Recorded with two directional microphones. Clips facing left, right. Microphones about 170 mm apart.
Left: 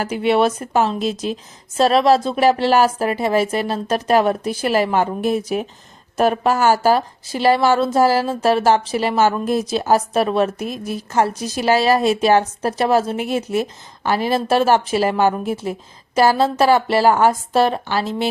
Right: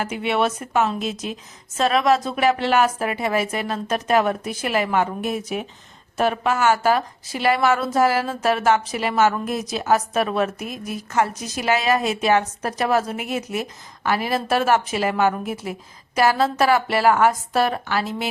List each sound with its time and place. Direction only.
0.0 s a woman's voice: 35° left (ahead or behind)